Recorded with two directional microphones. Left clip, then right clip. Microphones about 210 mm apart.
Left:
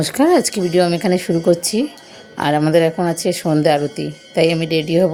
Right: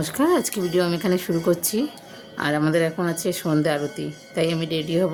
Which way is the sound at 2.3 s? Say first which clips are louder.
Left 7 dB; 90° right.